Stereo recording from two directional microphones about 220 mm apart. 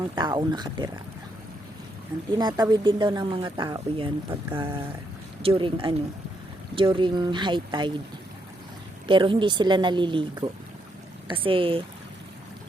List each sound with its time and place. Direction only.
0.0 s speech: 20° right (ahead or behind)
2.3 s speech: 20° right (ahead or behind)
9.0 s speech: 25° right (ahead or behind)